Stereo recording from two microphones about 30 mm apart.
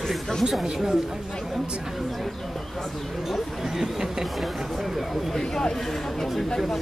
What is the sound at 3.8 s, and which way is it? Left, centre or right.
Speech, centre.